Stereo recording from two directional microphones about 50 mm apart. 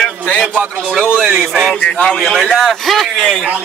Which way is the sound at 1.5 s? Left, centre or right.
Centre.